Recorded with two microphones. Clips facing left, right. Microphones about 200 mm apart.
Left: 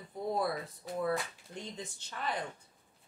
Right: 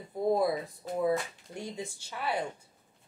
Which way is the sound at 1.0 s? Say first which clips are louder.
Right 5 dB; 10° right (ahead or behind).